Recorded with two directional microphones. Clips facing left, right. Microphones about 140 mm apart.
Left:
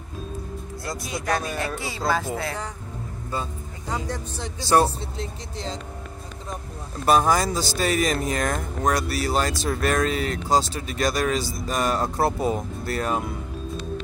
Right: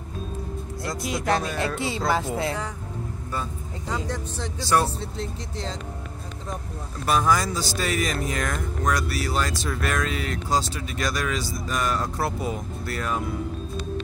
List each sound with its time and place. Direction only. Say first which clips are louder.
1.2 s speech: right 1 dB; 25° right (ahead or behind)
4.1 s speech: right 1 dB; 5° left (ahead or behind)
7.1 s speech: left 3 dB; 35° left (ahead or behind)